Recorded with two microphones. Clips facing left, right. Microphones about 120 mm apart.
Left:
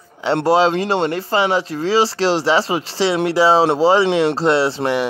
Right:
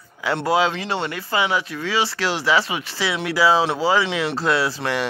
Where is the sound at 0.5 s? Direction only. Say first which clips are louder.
Left 5 dB; 30° left (ahead or behind).